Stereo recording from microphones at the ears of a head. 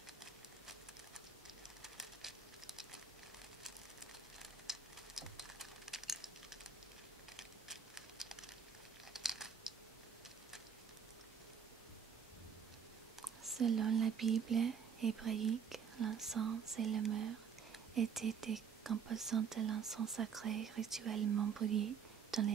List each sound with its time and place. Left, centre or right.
2.0 s patter: centre
5.4 s typing: centre
9.1 s crumpling: centre
13.6 s speech: right